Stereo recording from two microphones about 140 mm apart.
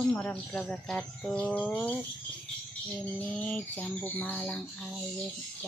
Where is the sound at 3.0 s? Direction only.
10° left (ahead or behind).